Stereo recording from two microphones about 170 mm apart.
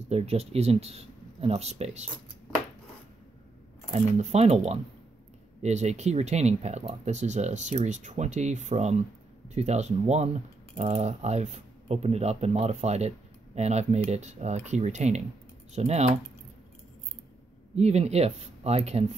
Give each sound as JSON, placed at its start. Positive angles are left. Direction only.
{"t": 0.0, "sound": "speech", "side_deg": -40}
{"t": 3.9, "sound": "speech", "side_deg": -40}
{"t": 17.7, "sound": "speech", "side_deg": -40}